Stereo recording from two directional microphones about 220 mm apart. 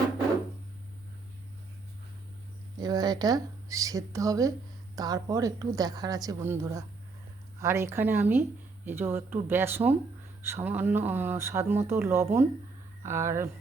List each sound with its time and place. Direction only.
2.7 s speech: 20° right (ahead or behind)